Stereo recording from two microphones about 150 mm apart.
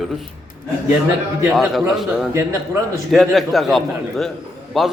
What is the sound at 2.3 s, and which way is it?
Speech, 15° right (ahead or behind).